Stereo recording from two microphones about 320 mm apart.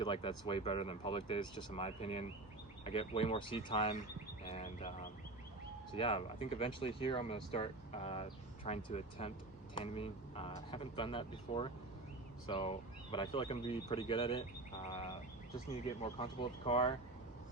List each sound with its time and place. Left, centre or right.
0.0 s speech: centre
4.4 s bird: centre
5.9 s speech: centre